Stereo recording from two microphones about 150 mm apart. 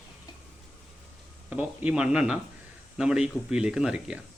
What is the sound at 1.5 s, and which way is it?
A man's voice, 10° right (ahead or behind).